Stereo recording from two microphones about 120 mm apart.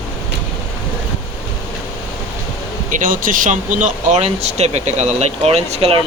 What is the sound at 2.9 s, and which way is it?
Speech, 90° right.